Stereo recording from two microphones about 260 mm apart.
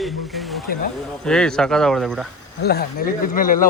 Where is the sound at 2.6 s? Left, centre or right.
Left.